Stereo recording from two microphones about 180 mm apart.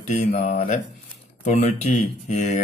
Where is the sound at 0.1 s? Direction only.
35° left (ahead or behind).